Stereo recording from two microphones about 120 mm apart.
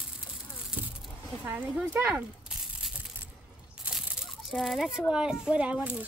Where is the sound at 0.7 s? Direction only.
10° right (ahead or behind).